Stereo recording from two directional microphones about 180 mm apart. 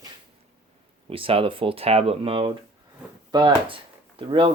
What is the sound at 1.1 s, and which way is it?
Speech, 30° right (ahead or behind).